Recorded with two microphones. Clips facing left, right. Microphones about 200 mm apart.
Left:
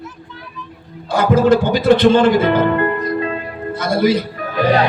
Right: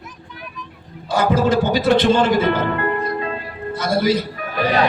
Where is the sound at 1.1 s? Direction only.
55° left (ahead or behind).